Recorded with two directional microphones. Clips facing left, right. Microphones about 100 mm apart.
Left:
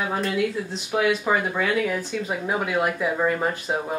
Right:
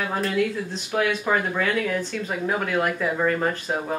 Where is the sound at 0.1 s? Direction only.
10° left (ahead or behind).